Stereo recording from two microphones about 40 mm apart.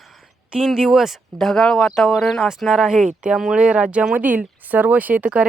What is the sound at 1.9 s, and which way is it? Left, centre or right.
Speech, centre.